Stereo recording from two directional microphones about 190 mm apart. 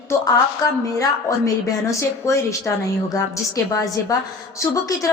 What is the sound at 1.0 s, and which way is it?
A woman's voice, 15° left (ahead or behind).